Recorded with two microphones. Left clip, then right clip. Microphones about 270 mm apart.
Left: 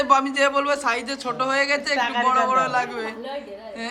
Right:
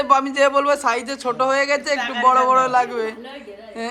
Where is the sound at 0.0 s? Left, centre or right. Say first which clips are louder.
Right 2 dB; centre.